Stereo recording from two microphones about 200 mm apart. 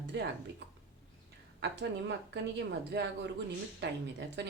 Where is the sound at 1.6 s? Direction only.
60° right (ahead or behind).